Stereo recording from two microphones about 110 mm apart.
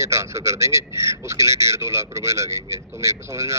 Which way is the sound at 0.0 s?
25° right (ahead or behind).